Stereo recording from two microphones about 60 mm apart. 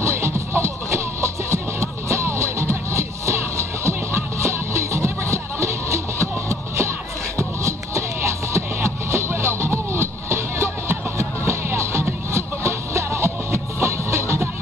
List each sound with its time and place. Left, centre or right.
0.0 s music: right